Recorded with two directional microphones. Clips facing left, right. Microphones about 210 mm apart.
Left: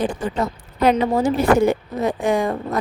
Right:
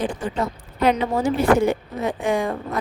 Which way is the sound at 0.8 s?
40° left (ahead or behind).